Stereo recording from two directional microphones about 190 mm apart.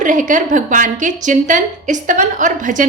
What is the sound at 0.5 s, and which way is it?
A woman's voice, 45° right (ahead or behind).